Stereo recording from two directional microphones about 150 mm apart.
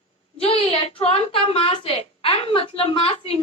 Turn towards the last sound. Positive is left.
turn(degrees=40)  # may be behind; listen again after turning